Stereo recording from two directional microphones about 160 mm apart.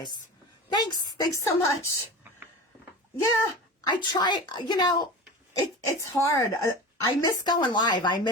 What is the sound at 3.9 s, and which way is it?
A woman's voice, 25° left (ahead or behind).